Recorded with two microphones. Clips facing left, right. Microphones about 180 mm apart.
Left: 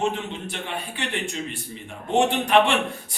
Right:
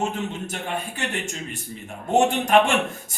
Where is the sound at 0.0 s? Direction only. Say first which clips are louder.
Left 1 dB; 45° right (ahead or behind).